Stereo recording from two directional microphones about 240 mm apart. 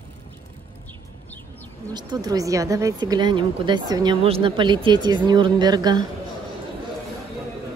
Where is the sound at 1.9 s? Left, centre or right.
Centre.